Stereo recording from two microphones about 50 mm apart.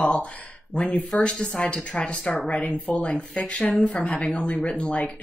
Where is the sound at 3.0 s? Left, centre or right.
Left.